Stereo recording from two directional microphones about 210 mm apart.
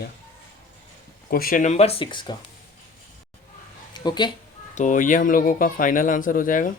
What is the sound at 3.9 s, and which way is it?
Speech, 20° left (ahead or behind).